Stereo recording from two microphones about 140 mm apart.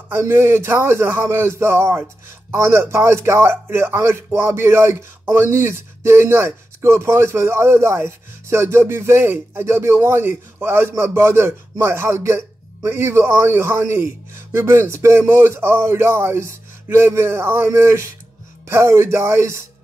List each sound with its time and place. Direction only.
0.1 s speech: 15° right (ahead or behind)